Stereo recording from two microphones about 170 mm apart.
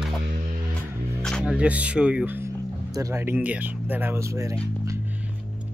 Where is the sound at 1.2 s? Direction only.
Centre (ahead or behind); by 4.5 s 20° right (ahead or behind).